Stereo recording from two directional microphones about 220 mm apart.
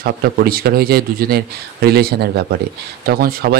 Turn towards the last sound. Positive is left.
turn(degrees=-40)  # may be behind; listen again after turning